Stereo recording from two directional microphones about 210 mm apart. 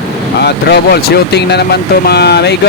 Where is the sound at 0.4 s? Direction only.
50° left (ahead or behind).